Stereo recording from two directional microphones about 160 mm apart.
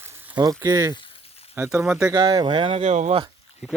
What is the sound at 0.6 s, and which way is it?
Speech, 20° right (ahead or behind).